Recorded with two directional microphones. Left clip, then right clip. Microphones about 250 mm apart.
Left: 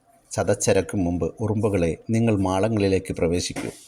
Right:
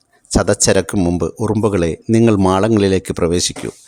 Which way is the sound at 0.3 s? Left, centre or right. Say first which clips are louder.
Right 7 dB; right.